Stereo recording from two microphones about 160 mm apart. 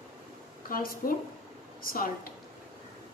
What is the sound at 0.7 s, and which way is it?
A woman's voice, 65° left (ahead or behind).